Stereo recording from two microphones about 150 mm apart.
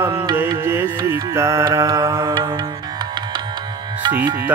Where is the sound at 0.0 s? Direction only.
20° right (ahead or behind).